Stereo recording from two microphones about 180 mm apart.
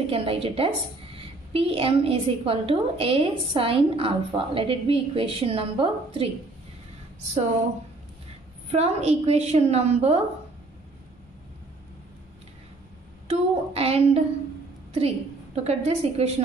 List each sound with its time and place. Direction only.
0.0 s a woman's voice: 30° right (ahead or behind)
8.7 s a woman's voice: 35° right (ahead or behind)
13.3 s a woman's voice: 35° right (ahead or behind)